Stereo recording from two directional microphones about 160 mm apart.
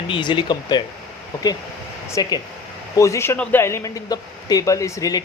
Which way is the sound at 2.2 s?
25° left (ahead or behind).